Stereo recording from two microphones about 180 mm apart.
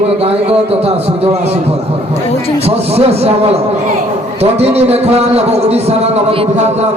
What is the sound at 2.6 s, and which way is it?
A man's voice, 35° right (ahead or behind).